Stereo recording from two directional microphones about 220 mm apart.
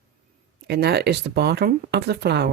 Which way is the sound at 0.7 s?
50° right (ahead or behind).